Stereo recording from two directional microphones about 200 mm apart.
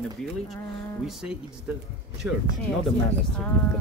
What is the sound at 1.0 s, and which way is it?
Speech, centre (ahead or behind).